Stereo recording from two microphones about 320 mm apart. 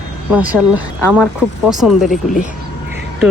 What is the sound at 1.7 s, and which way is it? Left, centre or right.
Speech, centre.